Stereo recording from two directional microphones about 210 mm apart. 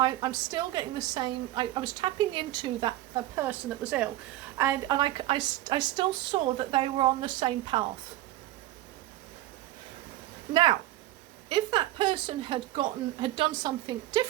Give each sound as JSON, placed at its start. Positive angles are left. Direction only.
{"t": 0.0, "sound": "a woman's voice", "side_deg": -20}
{"t": 3.3, "sound": "a woman's voice", "side_deg": -10}
{"t": 10.5, "sound": "a woman's voice", "side_deg": -25}